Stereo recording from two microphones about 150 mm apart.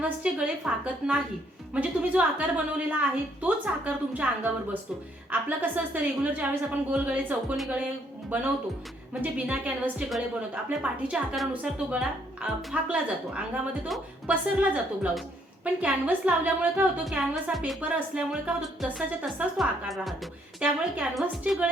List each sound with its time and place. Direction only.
0.0 s a woman's voice: 10° right (ahead or behind)
9.2 s a woman's voice: 10° right (ahead or behind)